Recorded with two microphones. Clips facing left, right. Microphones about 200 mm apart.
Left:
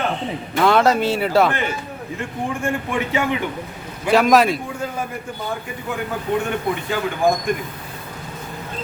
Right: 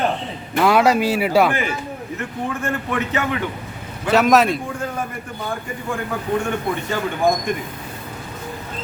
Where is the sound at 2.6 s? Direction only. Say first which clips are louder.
Left 1 dB; 10° left (ahead or behind).